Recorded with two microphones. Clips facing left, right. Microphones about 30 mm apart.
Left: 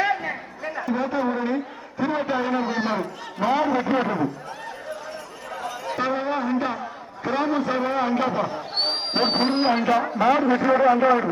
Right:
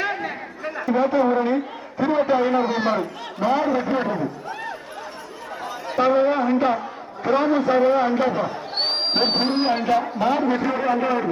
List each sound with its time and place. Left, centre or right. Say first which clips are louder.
0.0 s a sound: left 2 dB; right
0.6 s a man's voice: right 5 dB; centre
3.4 s a man's voice: right 1 dB; centre
5.9 s a man's voice: right 7 dB; centre
8.8 s a sound: right 2 dB; right
9.1 s a man's voice: left 1 dB; centre
10.9 s speech: left 3 dB; centre